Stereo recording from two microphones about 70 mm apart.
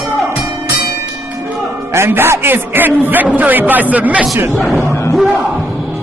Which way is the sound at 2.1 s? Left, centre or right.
Right.